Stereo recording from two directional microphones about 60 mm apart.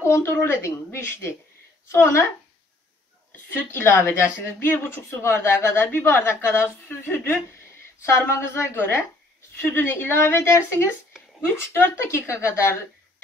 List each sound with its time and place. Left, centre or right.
0.1 s speech: left
3.7 s speech: left